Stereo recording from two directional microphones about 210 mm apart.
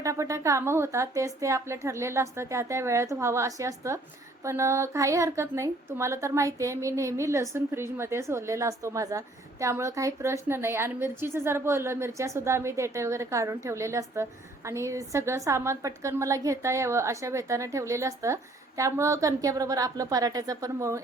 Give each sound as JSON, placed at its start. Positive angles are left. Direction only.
{"t": 0.0, "sound": "a woman's voice", "side_deg": -15}